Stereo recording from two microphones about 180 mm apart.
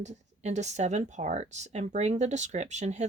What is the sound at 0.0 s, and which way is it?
Speech, 40° right (ahead or behind).